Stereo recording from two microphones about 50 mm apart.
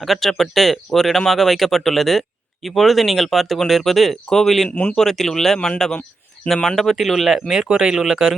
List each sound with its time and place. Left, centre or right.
0.0 s speech: centre
4.7 s speech: left
4.9 s speech: centre